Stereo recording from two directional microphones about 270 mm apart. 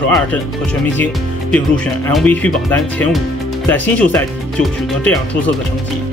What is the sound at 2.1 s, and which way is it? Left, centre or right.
Speech, centre.